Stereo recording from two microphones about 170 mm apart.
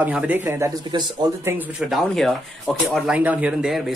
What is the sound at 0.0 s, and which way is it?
Speech, 10° right (ahead or behind).